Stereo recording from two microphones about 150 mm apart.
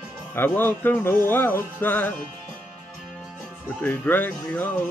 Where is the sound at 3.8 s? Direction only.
15° left (ahead or behind).